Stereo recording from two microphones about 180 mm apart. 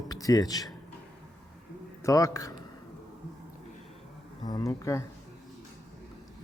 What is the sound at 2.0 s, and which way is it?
Speech, 20° left (ahead or behind).